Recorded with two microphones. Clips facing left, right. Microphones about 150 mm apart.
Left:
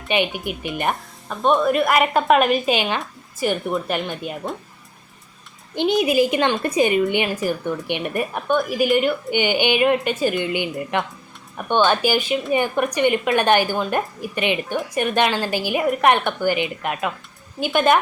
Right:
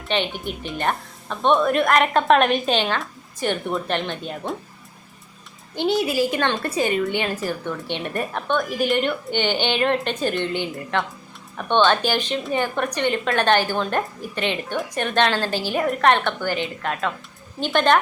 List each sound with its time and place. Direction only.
0.1 s a woman's voice: 10° left (ahead or behind)
1.4 s a woman's voice: centre (ahead or behind)
5.7 s a woman's voice: 20° left (ahead or behind)